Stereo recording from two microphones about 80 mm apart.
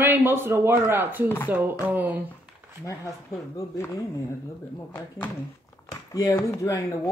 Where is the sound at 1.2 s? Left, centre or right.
Left.